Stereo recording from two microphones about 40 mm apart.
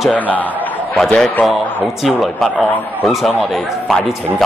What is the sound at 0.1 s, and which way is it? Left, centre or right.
Speech, left.